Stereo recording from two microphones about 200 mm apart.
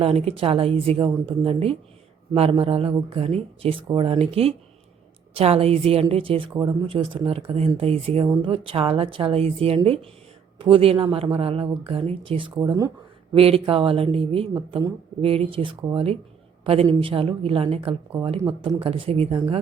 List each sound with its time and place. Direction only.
0.0 s speech: 30° right (ahead or behind)